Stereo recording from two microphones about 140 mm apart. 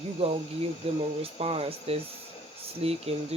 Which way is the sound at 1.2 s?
45° right (ahead or behind).